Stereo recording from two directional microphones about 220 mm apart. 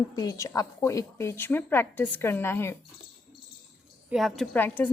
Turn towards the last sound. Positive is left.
turn(degrees=10)  # may be behind; listen again after turning